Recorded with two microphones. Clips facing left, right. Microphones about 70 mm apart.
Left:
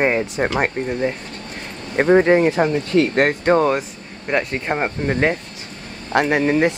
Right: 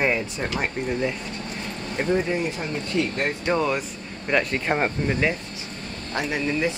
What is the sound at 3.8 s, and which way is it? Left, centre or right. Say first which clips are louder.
Speech: left 3 dB; left.